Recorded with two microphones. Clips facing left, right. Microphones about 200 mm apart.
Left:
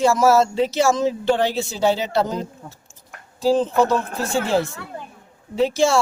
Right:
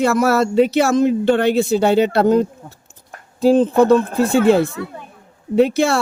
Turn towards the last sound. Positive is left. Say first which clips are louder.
# right 4 dB
turn(degrees=-60)  # may be behind; listen again after turning